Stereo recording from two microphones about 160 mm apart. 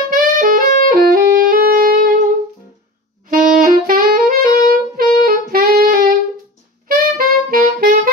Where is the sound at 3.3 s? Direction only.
60° right (ahead or behind).